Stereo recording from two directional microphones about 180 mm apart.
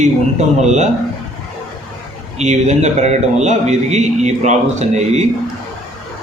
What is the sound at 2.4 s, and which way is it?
A man's voice, 40° right (ahead or behind).